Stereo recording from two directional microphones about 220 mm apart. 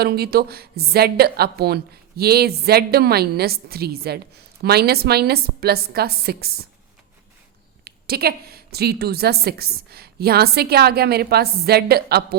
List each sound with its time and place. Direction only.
0.0 s a woman's voice: 45° right (ahead or behind)
7.9 s a woman's voice: 45° right (ahead or behind)